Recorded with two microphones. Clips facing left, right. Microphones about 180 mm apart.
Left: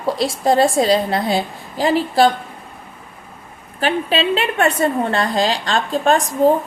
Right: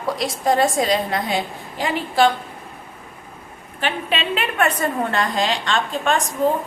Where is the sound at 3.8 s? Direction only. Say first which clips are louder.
Left 5 dB; 35° left (ahead or behind).